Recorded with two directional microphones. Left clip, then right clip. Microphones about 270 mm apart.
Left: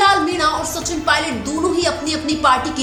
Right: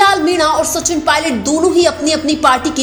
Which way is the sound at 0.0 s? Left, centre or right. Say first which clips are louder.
Right 4 dB; right.